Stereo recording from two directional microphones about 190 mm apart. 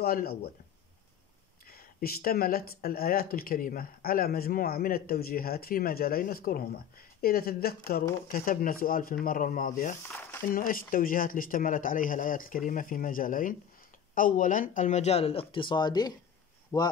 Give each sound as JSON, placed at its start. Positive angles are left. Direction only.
{"t": 0.0, "sound": "speech", "side_deg": 50}
{"t": 1.7, "sound": "speech", "side_deg": 50}